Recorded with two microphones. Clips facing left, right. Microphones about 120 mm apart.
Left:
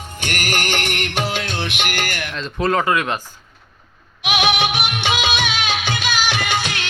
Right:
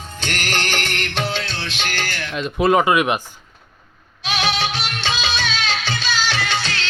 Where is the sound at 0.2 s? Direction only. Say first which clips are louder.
Left 1 dB; 15° left (ahead or behind).